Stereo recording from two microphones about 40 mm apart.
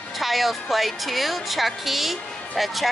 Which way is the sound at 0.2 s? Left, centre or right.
Centre.